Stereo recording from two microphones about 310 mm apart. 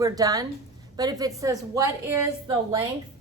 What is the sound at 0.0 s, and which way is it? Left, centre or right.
Speech, centre.